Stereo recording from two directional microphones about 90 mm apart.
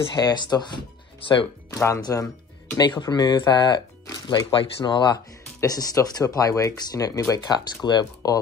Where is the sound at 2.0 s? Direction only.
40° left (ahead or behind).